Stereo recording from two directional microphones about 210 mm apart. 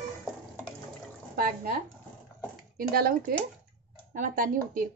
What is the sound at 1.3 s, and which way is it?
A woman's voice, 45° right (ahead or behind).